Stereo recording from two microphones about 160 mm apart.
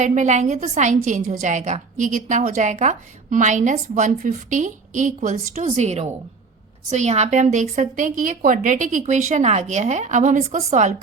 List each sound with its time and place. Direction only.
0.0 s a woman's voice: 50° right (ahead or behind)